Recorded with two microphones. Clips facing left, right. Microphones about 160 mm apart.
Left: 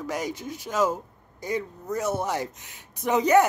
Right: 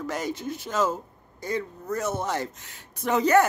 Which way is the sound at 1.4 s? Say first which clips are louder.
Even; 15° left (ahead or behind).